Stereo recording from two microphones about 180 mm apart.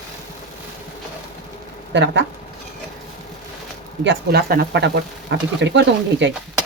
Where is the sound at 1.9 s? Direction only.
80° right.